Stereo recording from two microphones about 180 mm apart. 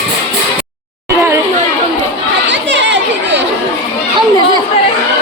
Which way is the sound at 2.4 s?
85° right.